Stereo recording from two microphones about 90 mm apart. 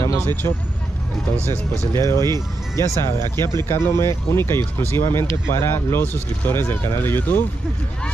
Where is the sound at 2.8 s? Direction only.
30° left (ahead or behind).